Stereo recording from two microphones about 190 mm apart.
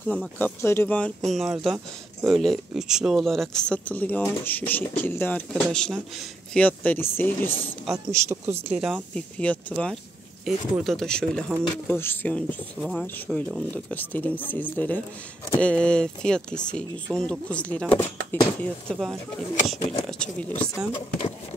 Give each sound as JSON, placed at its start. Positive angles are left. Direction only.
{"t": 0.4, "sound": "speech", "side_deg": 15}
{"t": 7.9, "sound": "a man's voice", "side_deg": -15}
{"t": 8.7, "sound": "speech", "side_deg": 0}
{"t": 19.8, "sound": "speech", "side_deg": 30}
{"t": 20.1, "sound": "speech", "side_deg": 5}